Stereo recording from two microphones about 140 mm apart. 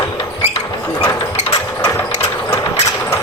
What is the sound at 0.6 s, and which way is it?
Ratchet, 20° left (ahead or behind).